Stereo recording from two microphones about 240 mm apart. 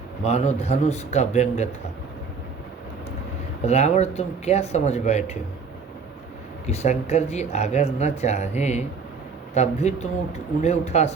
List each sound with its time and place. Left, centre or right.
0.3 s speech: left
3.7 s speech: left
6.7 s speech: left